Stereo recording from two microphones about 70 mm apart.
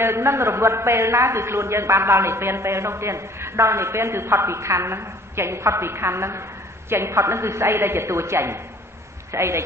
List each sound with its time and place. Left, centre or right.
0.0 s a man's voice: right